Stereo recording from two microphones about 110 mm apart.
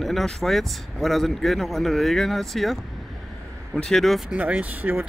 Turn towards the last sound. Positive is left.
turn(degrees=-15)  # may be behind; listen again after turning